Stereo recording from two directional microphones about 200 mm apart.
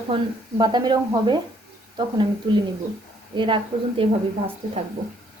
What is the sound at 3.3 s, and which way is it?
A woman's voice, 25° right (ahead or behind).